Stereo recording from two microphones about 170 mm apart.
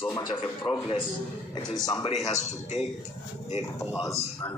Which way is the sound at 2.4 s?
40° left (ahead or behind).